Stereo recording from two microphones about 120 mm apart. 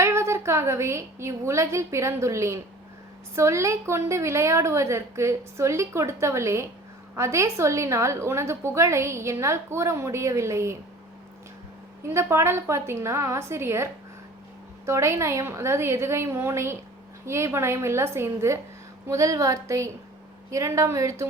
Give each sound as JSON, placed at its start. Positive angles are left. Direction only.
{"t": 0.0, "sound": "a woman's voice", "side_deg": -25}
{"t": 12.1, "sound": "a woman's voice", "side_deg": -20}